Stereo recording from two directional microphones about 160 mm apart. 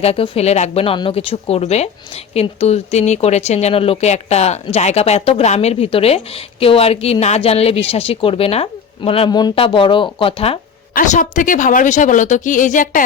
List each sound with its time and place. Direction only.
0.0 s speech: 40° left (ahead or behind)
10.9 s speech: 50° left (ahead or behind)